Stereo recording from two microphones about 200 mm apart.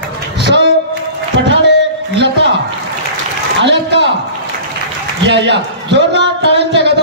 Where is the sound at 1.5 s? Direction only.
60° left (ahead or behind).